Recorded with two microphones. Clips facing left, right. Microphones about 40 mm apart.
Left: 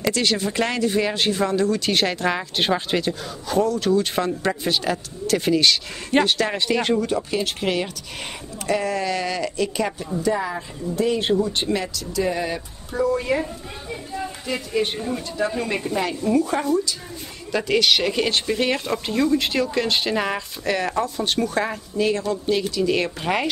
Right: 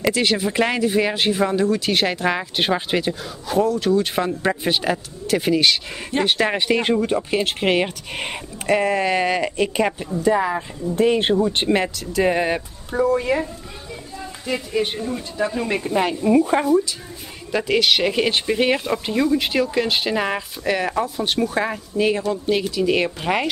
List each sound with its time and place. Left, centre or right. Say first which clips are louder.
0.0 s speech: right 2 dB; centre
11.0 s speech: right 3 dB; right
13.2 s a woman's voice: right 2 dB; centre
13.8 s a sound: left 5 dB; centre
14.4 s a woman's voice: right 2 dB; centre; by 16.6 s right
17.5 s speech: right 1 dB; centre